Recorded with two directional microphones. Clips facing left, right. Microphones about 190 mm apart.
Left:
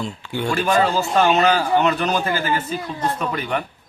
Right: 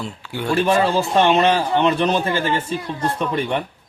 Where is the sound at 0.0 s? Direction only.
5° right (ahead or behind).